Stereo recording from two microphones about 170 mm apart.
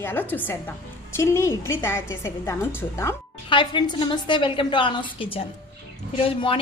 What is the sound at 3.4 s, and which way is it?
A woman's voice, 30° left (ahead or behind).